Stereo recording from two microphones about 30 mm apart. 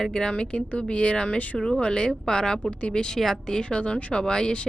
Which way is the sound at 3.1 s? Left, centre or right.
Centre.